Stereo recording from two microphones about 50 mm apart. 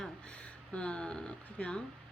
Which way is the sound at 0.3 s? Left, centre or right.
Left.